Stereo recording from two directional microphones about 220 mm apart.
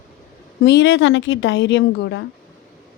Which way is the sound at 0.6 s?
55° left (ahead or behind).